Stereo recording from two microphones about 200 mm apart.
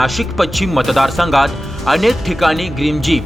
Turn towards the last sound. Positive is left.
turn(degrees=0)  # may be behind; listen again after turning